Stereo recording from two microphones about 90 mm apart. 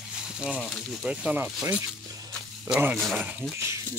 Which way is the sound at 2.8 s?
15° right (ahead or behind).